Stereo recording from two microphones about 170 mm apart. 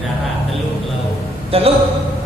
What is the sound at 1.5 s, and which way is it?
Speech, 35° right (ahead or behind).